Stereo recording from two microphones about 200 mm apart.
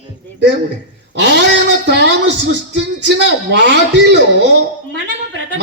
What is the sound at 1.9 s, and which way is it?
A woman's voice, 60° right (ahead or behind).